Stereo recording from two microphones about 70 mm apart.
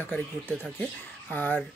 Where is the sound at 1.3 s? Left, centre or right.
Left.